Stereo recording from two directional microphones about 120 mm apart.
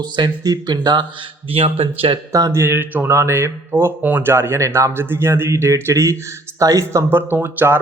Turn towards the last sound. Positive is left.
turn(degrees=-15)  # may be behind; listen again after turning